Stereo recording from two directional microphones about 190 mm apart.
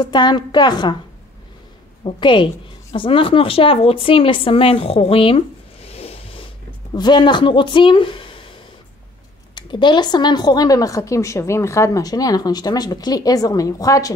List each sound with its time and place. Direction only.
0.0 s a woman's voice: 25° left (ahead or behind)
2.0 s a woman's voice: 25° left (ahead or behind)
5.9 s vehicle: 30° left (ahead or behind)
6.9 s speech: 20° left (ahead or behind)
9.6 s a woman's voice: 25° left (ahead or behind)